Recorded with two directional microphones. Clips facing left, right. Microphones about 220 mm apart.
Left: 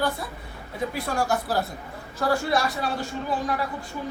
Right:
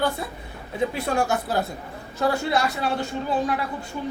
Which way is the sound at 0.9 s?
25° right (ahead or behind).